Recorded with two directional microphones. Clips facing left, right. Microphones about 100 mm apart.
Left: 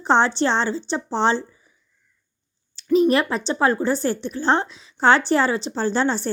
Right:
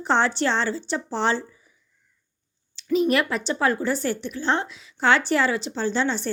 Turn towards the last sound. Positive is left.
turn(degrees=40)  # may be behind; listen again after turning